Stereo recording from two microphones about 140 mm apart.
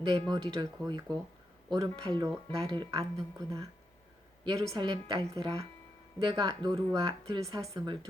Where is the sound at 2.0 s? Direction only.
35° right (ahead or behind).